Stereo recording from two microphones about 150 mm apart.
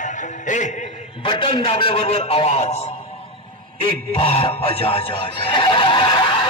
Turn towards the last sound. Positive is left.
turn(degrees=30)  # may be behind; listen again after turning